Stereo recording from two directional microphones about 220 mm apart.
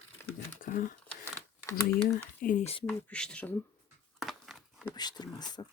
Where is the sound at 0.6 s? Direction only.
40° left (ahead or behind).